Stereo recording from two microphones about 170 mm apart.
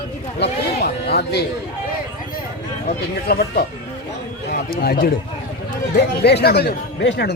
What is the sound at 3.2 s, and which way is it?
Speech, 65° left (ahead or behind).